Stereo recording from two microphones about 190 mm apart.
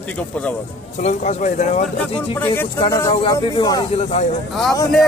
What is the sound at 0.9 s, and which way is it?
Speech, 40° left (ahead or behind).